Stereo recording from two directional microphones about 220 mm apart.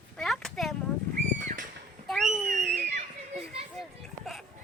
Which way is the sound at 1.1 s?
40° right (ahead or behind).